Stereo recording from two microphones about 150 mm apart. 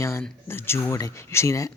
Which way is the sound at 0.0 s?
15° left (ahead or behind).